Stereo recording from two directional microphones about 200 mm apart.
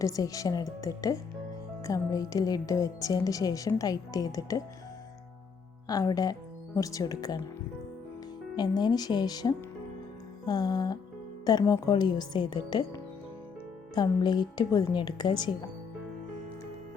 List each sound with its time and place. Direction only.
0.0 s a woman's voice: 15° left (ahead or behind)
5.9 s a woman's voice: 20° left (ahead or behind)
8.5 s a woman's voice: 20° left (ahead or behind)